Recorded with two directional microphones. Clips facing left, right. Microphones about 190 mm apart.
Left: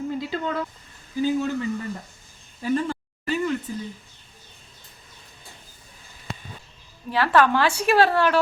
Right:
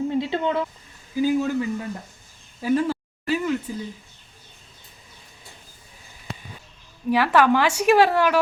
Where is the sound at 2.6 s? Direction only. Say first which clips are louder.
Right 3 dB; 10° right (ahead or behind).